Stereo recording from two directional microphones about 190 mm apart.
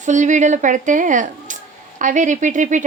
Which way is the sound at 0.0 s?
40° right (ahead or behind).